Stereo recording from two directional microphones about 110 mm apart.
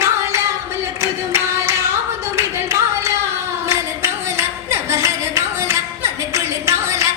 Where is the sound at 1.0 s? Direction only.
25° right (ahead or behind).